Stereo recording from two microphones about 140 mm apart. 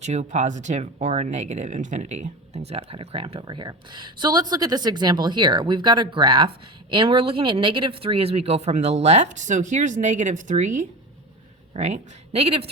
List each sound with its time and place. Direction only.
0.0 s speech: 55° right (ahead or behind)
3.4 s speech: 30° right (ahead or behind); by 10.8 s 60° right (ahead or behind)
11.7 s a woman's voice: 50° right (ahead or behind)